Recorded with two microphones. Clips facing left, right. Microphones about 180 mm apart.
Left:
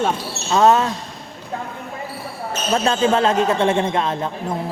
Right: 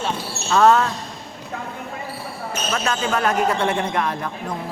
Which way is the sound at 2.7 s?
30° left (ahead or behind).